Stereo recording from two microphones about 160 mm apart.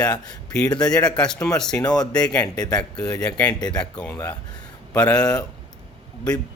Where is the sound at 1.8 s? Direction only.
25° left (ahead or behind).